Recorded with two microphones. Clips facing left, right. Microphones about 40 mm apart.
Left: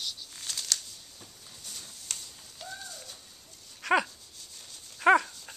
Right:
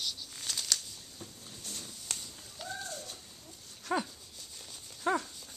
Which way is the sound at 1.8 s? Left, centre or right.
Centre.